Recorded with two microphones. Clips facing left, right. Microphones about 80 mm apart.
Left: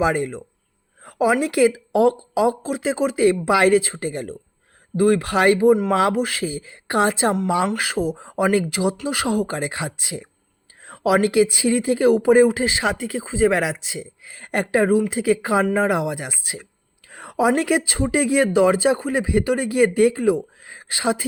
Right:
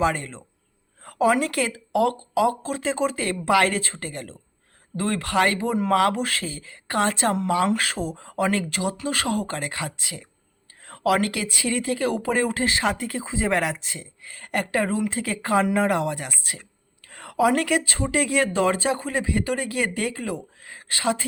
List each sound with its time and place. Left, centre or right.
0.0 s a woman's voice: centre
5.9 s speech: left
6.1 s speech: centre
17.1 s a sound: centre
17.5 s speech: centre